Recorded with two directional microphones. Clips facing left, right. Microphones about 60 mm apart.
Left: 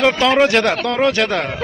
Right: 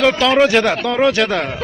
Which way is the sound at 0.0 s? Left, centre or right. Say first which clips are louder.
Even; left.